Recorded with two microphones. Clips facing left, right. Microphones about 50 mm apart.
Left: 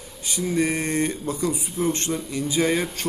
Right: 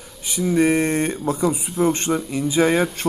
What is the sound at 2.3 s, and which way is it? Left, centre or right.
Speech, right.